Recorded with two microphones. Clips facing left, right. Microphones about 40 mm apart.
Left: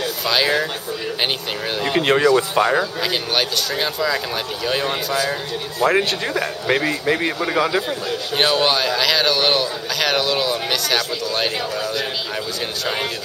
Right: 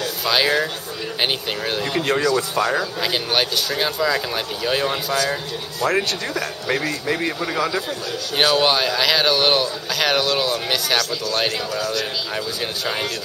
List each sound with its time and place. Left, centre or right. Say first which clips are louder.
0.2 s speech: even; centre
2.0 s speech: left 5 dB; left
3.0 s speech: even; centre
5.8 s speech: left 3 dB; centre
8.4 s speech: right 1 dB; centre
11.8 s speech: even; centre